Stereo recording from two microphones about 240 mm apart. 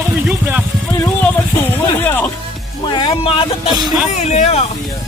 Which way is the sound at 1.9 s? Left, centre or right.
Centre.